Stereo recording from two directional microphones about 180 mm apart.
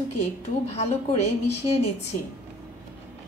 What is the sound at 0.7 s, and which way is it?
Speech, 35° left (ahead or behind).